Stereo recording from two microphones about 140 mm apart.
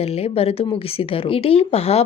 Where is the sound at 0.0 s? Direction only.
45° left (ahead or behind).